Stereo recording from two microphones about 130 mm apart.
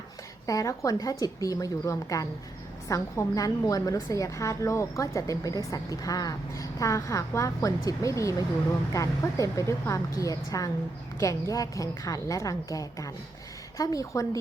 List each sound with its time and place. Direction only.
0.4 s a woman's voice: 25° left (ahead or behind)